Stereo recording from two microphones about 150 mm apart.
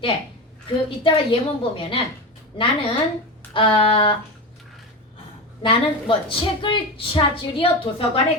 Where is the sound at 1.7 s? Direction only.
35° left (ahead or behind).